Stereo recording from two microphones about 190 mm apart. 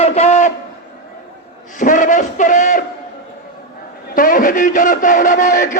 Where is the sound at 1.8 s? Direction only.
45° left (ahead or behind).